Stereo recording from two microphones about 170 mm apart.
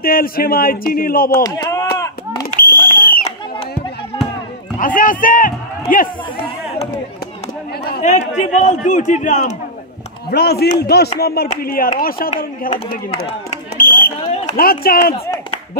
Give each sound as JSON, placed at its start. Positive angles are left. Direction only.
{"t": 0.0, "sound": "speech", "side_deg": 60}
{"t": 1.3, "sound": "speech", "side_deg": 20}
{"t": 2.6, "sound": "a sound", "side_deg": 60}
{"t": 4.7, "sound": "a man's voice", "side_deg": 50}
{"t": 8.0, "sound": "a man's voice", "side_deg": 45}
{"t": 10.3, "sound": "speech", "side_deg": 70}
{"t": 11.4, "sound": "speech", "side_deg": 50}
{"t": 13.7, "sound": "fire alarm", "side_deg": 55}
{"t": 14.1, "sound": "a sound", "side_deg": 40}
{"t": 14.6, "sound": "speech", "side_deg": 60}